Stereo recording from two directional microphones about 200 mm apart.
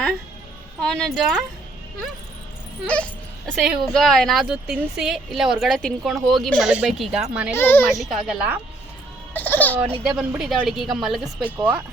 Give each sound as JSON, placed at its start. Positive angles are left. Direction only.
{"t": 0.9, "sound": "speech", "side_deg": 5}
{"t": 2.8, "sound": "speech", "side_deg": 5}
{"t": 7.5, "sound": "a woman's voice", "side_deg": 10}
{"t": 8.1, "sound": "speech", "side_deg": -5}
{"t": 9.3, "sound": "music", "side_deg": 10}
{"t": 10.0, "sound": "speech", "side_deg": -5}
{"t": 11.5, "sound": "speech", "side_deg": -15}